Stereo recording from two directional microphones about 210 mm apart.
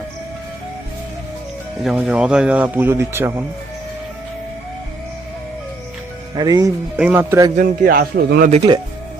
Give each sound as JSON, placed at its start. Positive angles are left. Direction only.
{"t": 1.8, "sound": "speech", "side_deg": 0}
{"t": 6.3, "sound": "speech", "side_deg": -20}
{"t": 7.5, "sound": "a man's voice", "side_deg": -40}
{"t": 8.4, "sound": "speech", "side_deg": -30}